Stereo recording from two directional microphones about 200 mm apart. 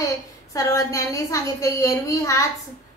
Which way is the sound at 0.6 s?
15° left (ahead or behind).